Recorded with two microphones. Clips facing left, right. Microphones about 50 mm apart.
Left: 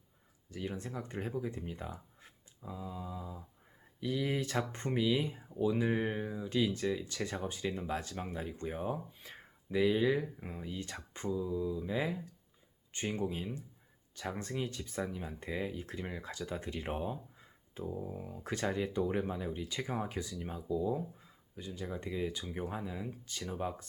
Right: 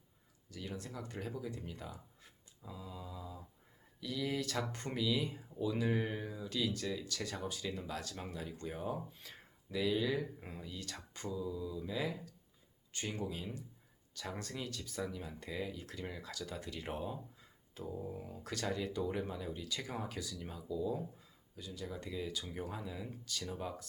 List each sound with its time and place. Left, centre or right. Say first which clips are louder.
0.5 s speech: left 5 dB; left
18.0 s speech: left 2 dB; centre
18.4 s speech: left 4 dB; left